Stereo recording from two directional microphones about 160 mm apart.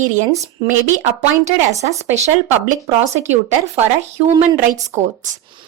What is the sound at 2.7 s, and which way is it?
Speech, 45° right (ahead or behind).